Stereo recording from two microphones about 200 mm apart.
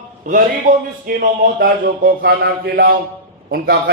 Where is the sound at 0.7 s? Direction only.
45° right (ahead or behind).